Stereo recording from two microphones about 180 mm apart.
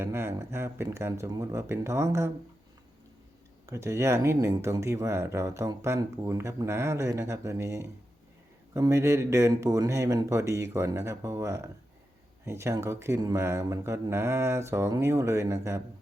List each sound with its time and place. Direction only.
0.0 s speech: 15° right (ahead or behind)
3.7 s speech: 15° right (ahead or behind)